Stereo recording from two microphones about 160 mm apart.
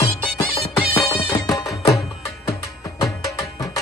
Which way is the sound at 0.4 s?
35° left (ahead or behind).